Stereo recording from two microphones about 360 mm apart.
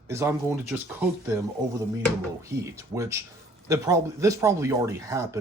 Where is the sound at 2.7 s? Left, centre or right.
Centre.